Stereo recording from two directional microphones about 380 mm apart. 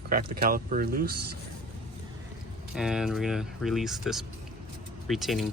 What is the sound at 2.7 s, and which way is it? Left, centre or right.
Speech, centre.